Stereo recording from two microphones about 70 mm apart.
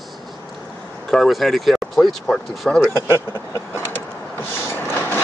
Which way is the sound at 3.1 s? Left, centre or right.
Left.